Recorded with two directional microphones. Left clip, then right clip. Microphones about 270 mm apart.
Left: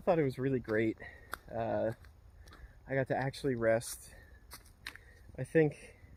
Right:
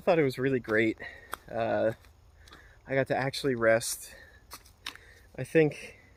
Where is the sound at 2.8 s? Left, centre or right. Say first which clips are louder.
Right 5 dB; centre.